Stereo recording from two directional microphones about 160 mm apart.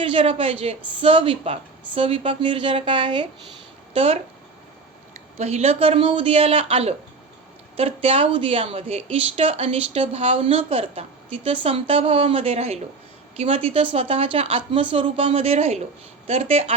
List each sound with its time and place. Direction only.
0.0 s a woman's voice: 35° right (ahead or behind)
5.4 s a woman's voice: 45° right (ahead or behind)